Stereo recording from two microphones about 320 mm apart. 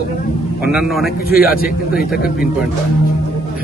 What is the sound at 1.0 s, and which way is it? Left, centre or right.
Speech, left.